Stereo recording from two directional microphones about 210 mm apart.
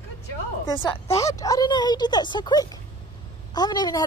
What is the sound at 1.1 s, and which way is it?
A woman's voice, 15° left (ahead or behind).